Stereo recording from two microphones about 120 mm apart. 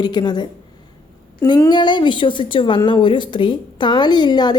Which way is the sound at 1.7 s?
40° left (ahead or behind).